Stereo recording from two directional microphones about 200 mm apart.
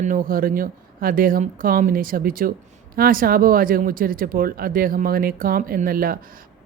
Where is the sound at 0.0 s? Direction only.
45° right (ahead or behind).